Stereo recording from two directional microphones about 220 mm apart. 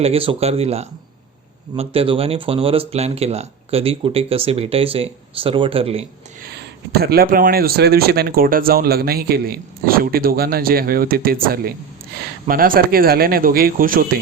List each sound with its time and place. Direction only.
0.0 s speech: 25° right (ahead or behind)
6.4 s speech: 45° right (ahead or behind)